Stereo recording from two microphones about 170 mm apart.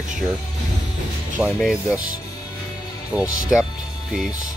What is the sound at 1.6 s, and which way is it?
Speech, centre (ahead or behind).